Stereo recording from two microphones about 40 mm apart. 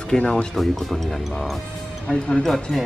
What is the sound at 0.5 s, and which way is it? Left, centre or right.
Speech, centre.